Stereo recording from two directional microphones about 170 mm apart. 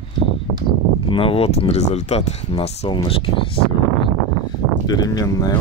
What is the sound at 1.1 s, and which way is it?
Speech, 35° left (ahead or behind).